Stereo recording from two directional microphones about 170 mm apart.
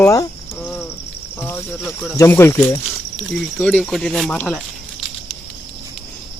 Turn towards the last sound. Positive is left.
turn(degrees=5)  # may be behind; listen again after turning